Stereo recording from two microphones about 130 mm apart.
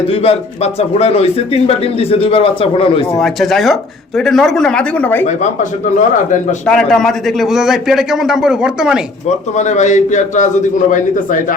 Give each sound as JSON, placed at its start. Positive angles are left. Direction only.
{"t": 0.1, "sound": "a man's voice", "side_deg": 50}
{"t": 3.2, "sound": "a man's voice", "side_deg": 0}
{"t": 5.2, "sound": "a man's voice", "side_deg": 65}
{"t": 6.7, "sound": "a man's voice", "side_deg": 5}
{"t": 9.3, "sound": "a man's voice", "side_deg": 65}